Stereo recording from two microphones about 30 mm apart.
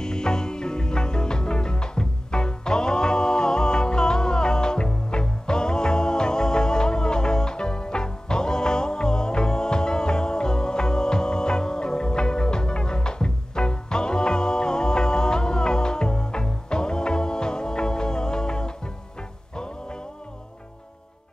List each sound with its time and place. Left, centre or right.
0.0 s music: left